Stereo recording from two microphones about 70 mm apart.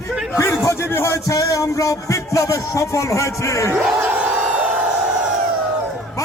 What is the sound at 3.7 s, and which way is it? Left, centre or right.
Crowd, centre.